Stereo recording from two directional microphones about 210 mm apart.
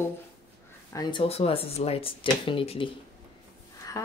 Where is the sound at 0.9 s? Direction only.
25° left (ahead or behind).